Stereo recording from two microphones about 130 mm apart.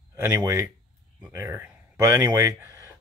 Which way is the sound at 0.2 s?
25° right (ahead or behind).